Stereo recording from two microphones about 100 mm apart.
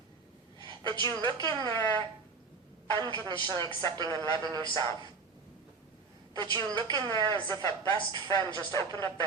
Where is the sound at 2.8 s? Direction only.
40° right (ahead or behind).